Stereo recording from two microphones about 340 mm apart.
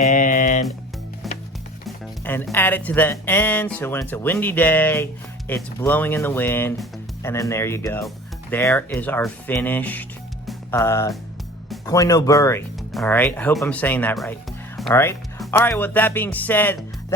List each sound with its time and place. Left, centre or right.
0.1 s music: left
2.2 s speech: centre